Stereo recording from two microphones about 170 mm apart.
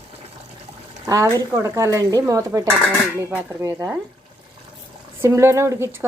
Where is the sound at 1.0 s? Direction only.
20° right (ahead or behind).